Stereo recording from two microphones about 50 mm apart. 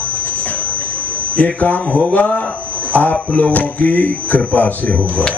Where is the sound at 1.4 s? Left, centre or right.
Left.